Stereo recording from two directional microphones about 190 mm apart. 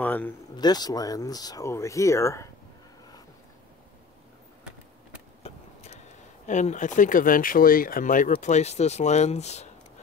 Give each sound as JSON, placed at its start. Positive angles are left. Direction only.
{"t": 0.0, "sound": "speech", "side_deg": 10}
{"t": 0.6, "sound": "speech", "side_deg": 20}
{"t": 5.4, "sound": "a sound", "side_deg": 35}
{"t": 6.4, "sound": "speech", "side_deg": 40}